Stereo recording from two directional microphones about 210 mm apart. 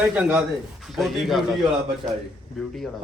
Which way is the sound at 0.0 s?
5° right (ahead or behind).